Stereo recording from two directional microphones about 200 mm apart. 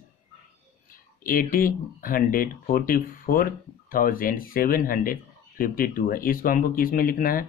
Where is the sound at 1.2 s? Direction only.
45° left (ahead or behind).